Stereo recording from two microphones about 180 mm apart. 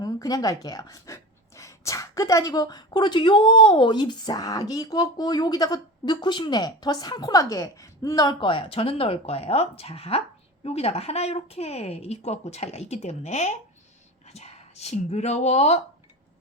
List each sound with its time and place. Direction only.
0.0 s a woman's voice: 20° left (ahead or behind); by 15.8 s 35° left (ahead or behind)